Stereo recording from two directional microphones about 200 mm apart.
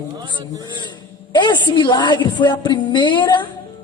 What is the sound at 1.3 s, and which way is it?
A woman's voice, 20° left (ahead or behind).